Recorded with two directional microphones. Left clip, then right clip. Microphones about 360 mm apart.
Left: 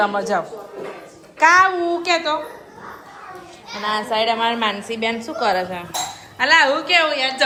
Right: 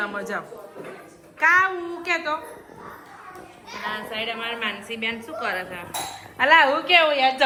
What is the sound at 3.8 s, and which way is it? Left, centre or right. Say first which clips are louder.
A woman's voice: left 10 dB; centre.